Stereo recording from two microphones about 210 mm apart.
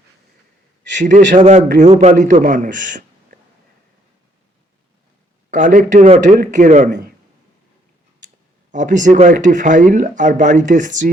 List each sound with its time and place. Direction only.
0.9 s a man's voice: 35° right (ahead or behind)
5.5 s speech: 35° right (ahead or behind)
8.7 s speech: 35° right (ahead or behind)